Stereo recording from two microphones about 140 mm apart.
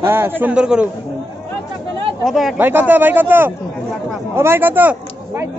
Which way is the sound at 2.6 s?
15° right (ahead or behind).